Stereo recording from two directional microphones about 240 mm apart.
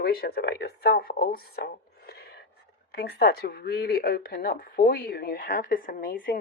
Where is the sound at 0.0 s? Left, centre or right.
Left.